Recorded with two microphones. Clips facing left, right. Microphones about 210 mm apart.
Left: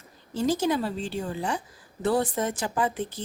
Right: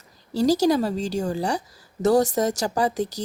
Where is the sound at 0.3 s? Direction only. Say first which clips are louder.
Right 6 dB; 40° right (ahead or behind).